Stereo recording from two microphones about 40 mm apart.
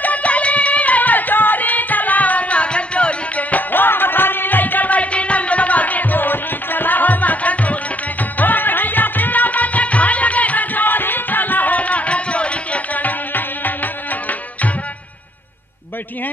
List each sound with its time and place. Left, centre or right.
0.0 s music: left
3.7 s music: left